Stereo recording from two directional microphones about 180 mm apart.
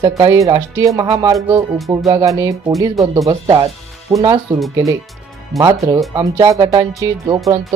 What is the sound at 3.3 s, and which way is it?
Speech, 30° right (ahead or behind).